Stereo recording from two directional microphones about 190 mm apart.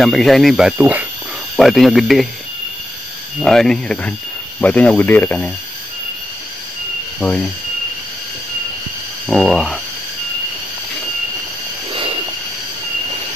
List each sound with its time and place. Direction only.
0.0 s speech: centre (ahead or behind)
3.3 s speech: centre (ahead or behind)
7.2 s cricket: 5° left (ahead or behind)
9.3 s speech: centre (ahead or behind)
11.9 s train: 30° right (ahead or behind)